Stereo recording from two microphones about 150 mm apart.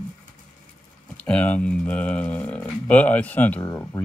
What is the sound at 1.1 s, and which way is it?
Speech, 10° left (ahead or behind).